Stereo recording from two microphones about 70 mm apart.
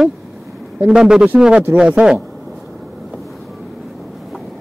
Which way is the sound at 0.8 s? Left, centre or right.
Centre.